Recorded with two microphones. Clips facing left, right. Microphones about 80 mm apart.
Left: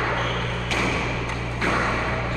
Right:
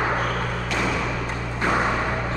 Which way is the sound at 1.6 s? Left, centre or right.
Centre.